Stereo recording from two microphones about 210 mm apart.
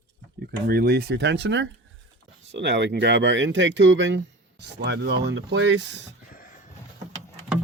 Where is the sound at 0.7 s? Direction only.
50° right (ahead or behind).